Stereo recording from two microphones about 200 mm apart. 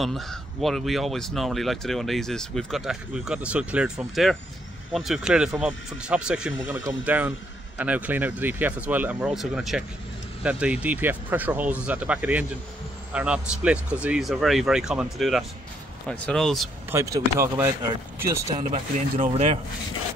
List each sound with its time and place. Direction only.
0.0 s a man's voice: centre (ahead or behind)
16.9 s a man's voice: 15° right (ahead or behind)
18.7 s speech: 30° right (ahead or behind)